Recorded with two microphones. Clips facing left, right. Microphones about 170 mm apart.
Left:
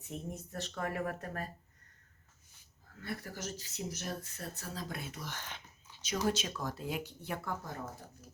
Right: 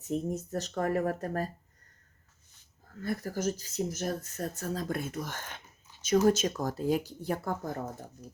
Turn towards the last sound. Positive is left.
turn(degrees=-50)  # may be behind; listen again after turning